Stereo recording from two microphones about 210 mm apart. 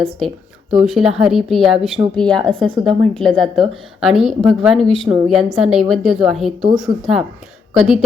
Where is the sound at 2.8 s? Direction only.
20° right (ahead or behind).